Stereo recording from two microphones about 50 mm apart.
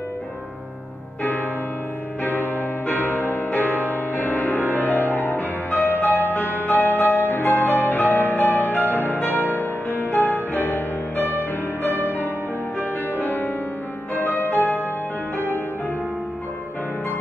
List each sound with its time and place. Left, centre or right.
2.9 s music: left